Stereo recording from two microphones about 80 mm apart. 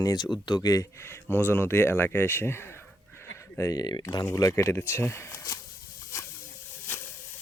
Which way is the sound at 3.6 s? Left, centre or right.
Left.